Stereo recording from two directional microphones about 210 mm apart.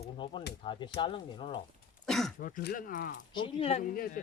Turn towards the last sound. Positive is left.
turn(degrees=40)  # may be behind; listen again after turning